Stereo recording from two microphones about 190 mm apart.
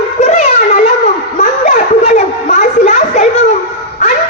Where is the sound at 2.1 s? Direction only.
40° left (ahead or behind).